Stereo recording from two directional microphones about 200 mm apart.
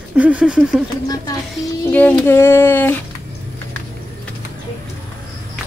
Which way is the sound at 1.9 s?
10° left (ahead or behind).